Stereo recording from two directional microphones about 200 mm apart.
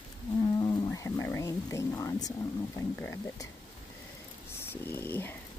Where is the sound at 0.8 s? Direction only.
15° left (ahead or behind).